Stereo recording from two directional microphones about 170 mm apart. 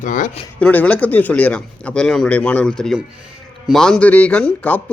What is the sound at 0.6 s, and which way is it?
Speech, 10° left (ahead or behind).